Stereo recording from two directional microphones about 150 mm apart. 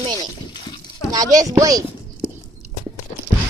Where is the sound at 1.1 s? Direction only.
25° right (ahead or behind).